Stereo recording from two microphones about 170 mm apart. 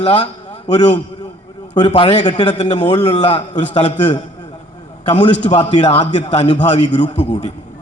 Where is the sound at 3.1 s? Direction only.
25° left (ahead or behind).